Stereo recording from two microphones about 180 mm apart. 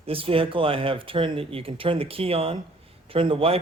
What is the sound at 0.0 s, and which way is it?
A man's voice, 30° right (ahead or behind).